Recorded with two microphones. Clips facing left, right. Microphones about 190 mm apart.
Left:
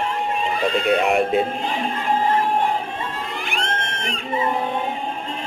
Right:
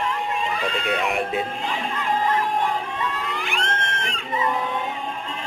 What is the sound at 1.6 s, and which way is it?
Music, 30° left (ahead or behind).